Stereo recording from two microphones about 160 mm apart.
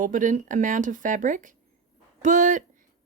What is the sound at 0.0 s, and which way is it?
Speech, 55° right (ahead or behind).